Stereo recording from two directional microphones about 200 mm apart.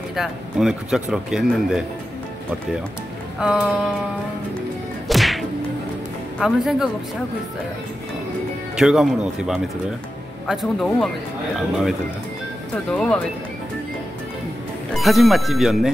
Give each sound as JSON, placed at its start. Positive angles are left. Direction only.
{"t": 0.1, "sound": "speech", "side_deg": 0}
{"t": 3.3, "sound": "speech", "side_deg": -5}
{"t": 5.0, "sound": "whip", "side_deg": 0}
{"t": 6.4, "sound": "speech", "side_deg": 0}
{"t": 8.7, "sound": "speech", "side_deg": -5}
{"t": 12.9, "sound": "speech", "side_deg": 5}
{"t": 15.0, "sound": "speech", "side_deg": 0}